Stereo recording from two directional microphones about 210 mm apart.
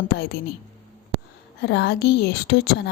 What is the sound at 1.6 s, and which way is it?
A woman's voice, 50° left (ahead or behind).